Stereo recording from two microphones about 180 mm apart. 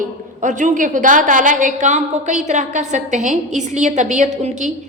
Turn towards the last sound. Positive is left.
turn(degrees=-40)  # may be behind; listen again after turning